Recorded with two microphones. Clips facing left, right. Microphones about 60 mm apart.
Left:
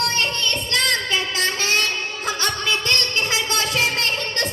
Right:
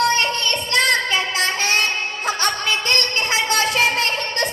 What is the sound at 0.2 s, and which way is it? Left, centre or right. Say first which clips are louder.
Child singing: right 2 dB; right.